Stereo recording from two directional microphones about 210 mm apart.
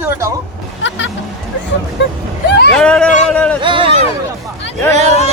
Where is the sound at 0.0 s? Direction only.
15° right (ahead or behind).